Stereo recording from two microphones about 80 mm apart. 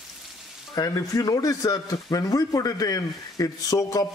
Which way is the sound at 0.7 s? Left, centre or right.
Left.